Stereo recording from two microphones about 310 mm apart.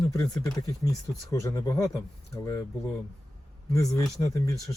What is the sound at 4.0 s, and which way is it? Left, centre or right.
Speech, centre.